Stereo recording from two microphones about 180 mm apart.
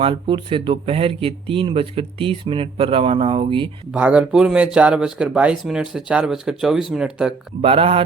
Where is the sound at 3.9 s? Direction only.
5° right (ahead or behind).